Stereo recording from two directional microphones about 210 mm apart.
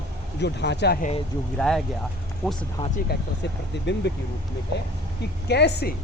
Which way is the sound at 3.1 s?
50° left (ahead or behind).